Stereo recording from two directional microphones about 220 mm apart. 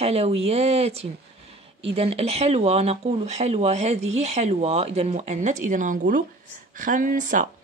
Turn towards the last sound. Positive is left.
turn(degrees=-35)  # may be behind; listen again after turning